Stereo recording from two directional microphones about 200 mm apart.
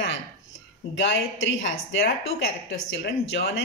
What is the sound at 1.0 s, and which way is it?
Speech, 65° left (ahead or behind).